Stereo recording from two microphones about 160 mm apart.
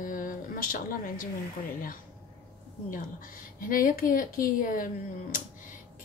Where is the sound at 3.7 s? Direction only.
60° left (ahead or behind).